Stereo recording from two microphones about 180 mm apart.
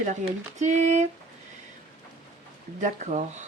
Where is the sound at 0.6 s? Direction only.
40° right (ahead or behind).